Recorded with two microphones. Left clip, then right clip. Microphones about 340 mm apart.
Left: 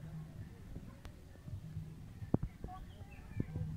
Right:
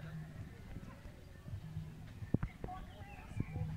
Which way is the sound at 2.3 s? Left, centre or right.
Left.